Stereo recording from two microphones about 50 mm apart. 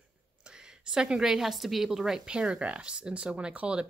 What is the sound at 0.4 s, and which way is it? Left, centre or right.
A woman's voice, centre.